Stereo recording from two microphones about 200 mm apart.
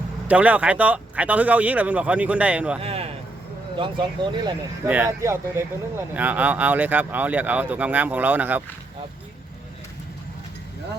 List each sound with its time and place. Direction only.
0.3 s speech: 5° right (ahead or behind)
2.8 s a sound: 30° right (ahead or behind)
3.8 s speech: 25° right (ahead or behind)
4.9 s speech: 10° right (ahead or behind)